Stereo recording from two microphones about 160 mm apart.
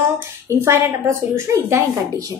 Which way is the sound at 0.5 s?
15° right (ahead or behind).